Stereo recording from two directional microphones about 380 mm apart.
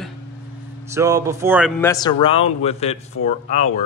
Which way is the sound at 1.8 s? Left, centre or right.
Centre.